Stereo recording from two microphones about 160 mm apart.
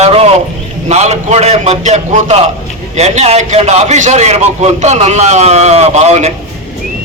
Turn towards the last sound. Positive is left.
turn(degrees=-40)  # may be behind; listen again after turning